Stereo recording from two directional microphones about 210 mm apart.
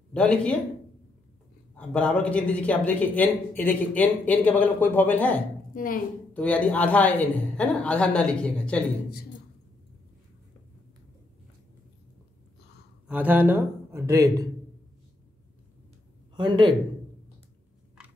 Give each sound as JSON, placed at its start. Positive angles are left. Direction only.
{"t": 0.1, "sound": "a woman's voice", "side_deg": 5}
{"t": 1.8, "sound": "a woman's voice", "side_deg": 5}
{"t": 13.1, "sound": "speech", "side_deg": -10}
{"t": 16.3, "sound": "speech", "side_deg": -20}